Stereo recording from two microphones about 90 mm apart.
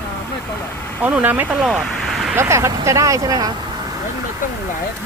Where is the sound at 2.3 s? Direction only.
30° right (ahead or behind).